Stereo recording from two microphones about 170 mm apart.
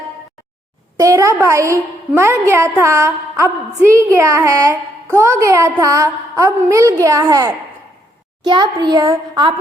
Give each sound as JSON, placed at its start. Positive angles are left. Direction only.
{"t": 0.9, "sound": "a woman's voice", "side_deg": -20}